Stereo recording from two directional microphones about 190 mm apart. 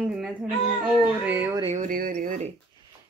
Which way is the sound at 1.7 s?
45° right (ahead or behind).